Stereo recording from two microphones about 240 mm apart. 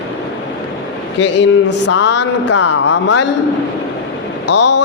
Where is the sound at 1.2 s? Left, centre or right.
Left.